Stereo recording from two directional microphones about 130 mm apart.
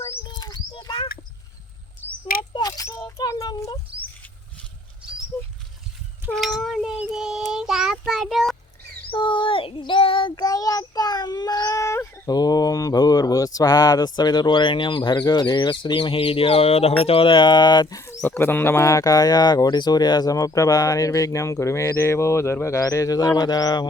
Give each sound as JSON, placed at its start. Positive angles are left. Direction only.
{"t": 0.3, "sound": "a sound", "side_deg": 35}
{"t": 2.5, "sound": "a sound", "side_deg": 30}
{"t": 6.3, "sound": "child singing", "side_deg": 0}
{"t": 9.0, "sound": "child singing", "side_deg": 40}
{"t": 10.3, "sound": "child singing", "side_deg": 30}
{"t": 12.3, "sound": "speech", "side_deg": 30}
{"t": 18.2, "sound": "speech", "side_deg": 15}